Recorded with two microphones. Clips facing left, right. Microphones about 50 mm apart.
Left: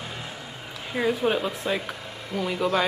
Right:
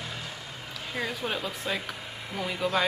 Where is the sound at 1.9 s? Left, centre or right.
Centre.